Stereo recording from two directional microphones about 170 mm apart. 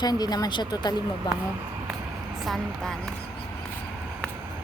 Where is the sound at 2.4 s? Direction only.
Centre (ahead or behind).